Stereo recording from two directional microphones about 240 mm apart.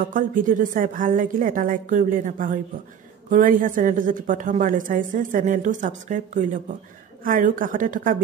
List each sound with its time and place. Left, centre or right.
0.0 s a woman's voice: right